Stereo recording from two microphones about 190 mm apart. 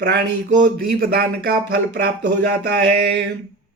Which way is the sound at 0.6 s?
50° right (ahead or behind).